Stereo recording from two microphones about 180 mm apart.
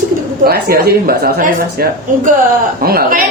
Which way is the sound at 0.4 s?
60° right (ahead or behind).